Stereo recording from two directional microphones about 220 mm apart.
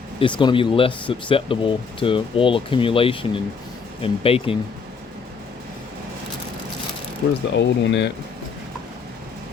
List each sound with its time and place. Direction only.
0.2 s speech: 20° left (ahead or behind)
7.5 s speech: 50° left (ahead or behind)